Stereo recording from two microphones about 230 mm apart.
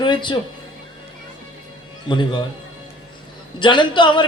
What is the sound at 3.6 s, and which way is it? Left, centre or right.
Speech, left.